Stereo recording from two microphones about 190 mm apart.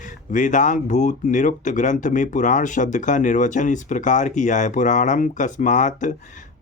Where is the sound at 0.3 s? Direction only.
40° left (ahead or behind).